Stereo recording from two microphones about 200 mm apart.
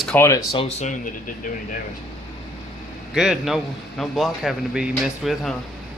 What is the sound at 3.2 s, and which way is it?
A man's voice, centre (ahead or behind).